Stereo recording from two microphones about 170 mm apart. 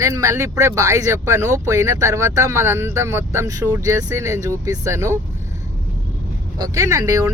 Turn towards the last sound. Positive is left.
turn(degrees=-20)  # may be behind; listen again after turning